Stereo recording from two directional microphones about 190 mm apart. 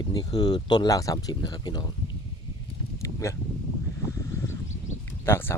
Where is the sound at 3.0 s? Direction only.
15° left (ahead or behind).